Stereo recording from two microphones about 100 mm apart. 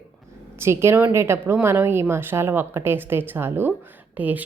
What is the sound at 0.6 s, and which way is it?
A woman's voice, 25° right (ahead or behind).